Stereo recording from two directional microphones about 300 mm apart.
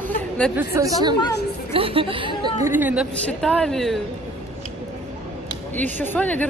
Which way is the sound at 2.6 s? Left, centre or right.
Centre.